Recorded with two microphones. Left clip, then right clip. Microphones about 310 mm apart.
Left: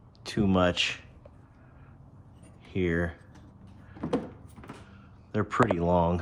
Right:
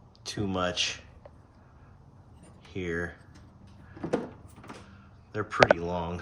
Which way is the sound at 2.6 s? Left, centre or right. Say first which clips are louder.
Left 4 dB; left.